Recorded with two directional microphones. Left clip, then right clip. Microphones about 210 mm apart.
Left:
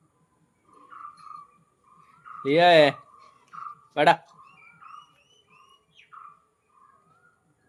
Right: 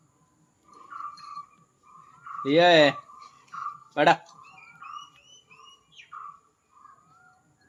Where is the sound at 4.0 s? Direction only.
20° left (ahead or behind).